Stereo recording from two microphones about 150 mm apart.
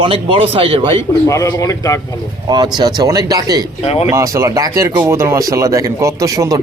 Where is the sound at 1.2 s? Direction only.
20° left (ahead or behind).